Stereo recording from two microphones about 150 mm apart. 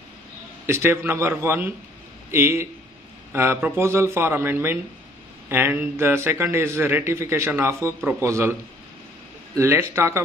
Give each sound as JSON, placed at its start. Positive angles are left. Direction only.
{"t": 0.7, "sound": "speech", "side_deg": -15}
{"t": 9.6, "sound": "speech", "side_deg": -15}